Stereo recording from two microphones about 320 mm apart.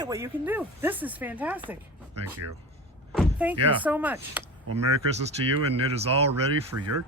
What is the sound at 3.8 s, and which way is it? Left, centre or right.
Speech, centre.